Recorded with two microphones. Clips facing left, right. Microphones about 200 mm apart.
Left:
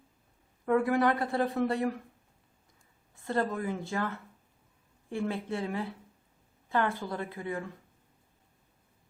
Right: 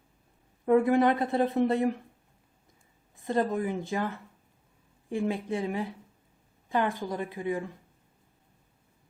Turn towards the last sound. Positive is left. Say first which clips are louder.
# right 4 dB
turn(degrees=-15)  # may be behind; listen again after turning